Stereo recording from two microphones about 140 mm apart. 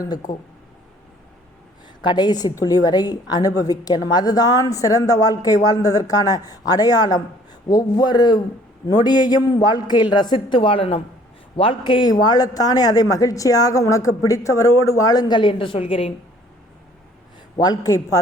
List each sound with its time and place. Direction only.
2.0 s a man's voice: 30° left (ahead or behind)
17.6 s speech: 25° left (ahead or behind)